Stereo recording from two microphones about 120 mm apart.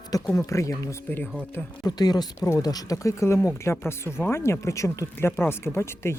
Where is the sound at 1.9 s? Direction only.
35° left (ahead or behind).